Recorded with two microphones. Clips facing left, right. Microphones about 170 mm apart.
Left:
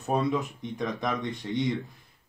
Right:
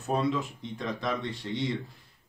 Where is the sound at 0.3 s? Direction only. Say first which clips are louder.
Left 2 dB; 20° left (ahead or behind).